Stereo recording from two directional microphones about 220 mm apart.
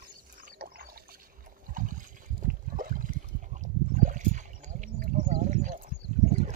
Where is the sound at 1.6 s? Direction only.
35° right (ahead or behind).